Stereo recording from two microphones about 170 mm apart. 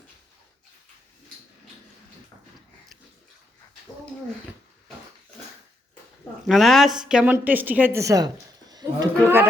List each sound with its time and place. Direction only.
6.5 s a woman's voice: centre (ahead or behind); by 9.4 s 20° right (ahead or behind)